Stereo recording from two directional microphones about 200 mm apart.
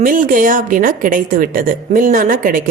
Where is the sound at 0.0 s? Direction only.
40° right (ahead or behind).